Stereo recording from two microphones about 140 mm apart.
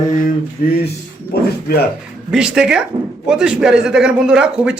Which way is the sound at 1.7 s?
90° left.